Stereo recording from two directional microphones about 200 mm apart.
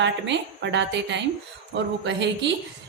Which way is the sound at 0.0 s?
65° right (ahead or behind).